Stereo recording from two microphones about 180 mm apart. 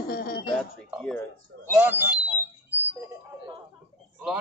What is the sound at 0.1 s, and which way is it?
Throat clearing, 60° left (ahead or behind).